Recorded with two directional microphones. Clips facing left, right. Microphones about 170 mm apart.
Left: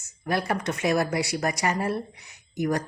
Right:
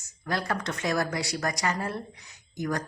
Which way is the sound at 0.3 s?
20° left (ahead or behind).